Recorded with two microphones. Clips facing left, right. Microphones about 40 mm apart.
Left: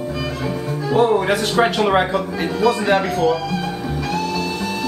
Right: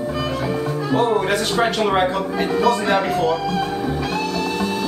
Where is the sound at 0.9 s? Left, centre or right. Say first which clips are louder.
Left 3 dB; centre.